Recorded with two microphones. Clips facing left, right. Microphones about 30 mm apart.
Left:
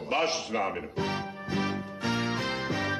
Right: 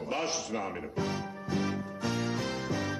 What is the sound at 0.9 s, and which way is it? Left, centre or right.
Music, left.